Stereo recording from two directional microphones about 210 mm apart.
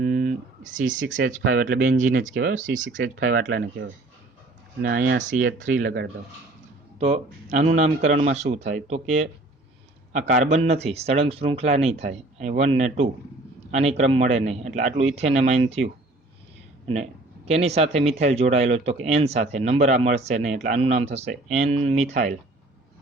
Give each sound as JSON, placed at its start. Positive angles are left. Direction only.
{"t": 0.0, "sound": "a sound", "side_deg": -40}
{"t": 0.9, "sound": "speech", "side_deg": -65}
{"t": 1.3, "sound": "speech", "side_deg": -45}
{"t": 3.2, "sound": "speech", "side_deg": -45}
{"t": 7.0, "sound": "speech", "side_deg": -30}